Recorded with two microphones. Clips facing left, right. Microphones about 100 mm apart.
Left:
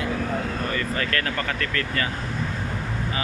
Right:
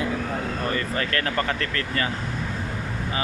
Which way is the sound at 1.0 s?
30° right (ahead or behind).